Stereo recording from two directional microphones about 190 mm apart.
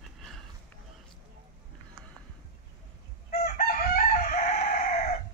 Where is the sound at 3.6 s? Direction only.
50° left (ahead or behind).